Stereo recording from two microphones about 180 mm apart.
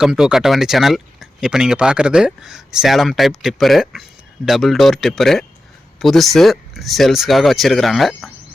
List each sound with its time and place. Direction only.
0.0 s speech: 5° right (ahead or behind)